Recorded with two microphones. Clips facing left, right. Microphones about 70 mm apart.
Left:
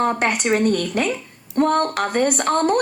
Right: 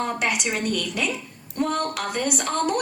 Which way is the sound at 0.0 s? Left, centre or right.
Left.